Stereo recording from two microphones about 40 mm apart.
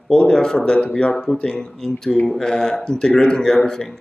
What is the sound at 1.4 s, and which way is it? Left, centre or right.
Speech, centre.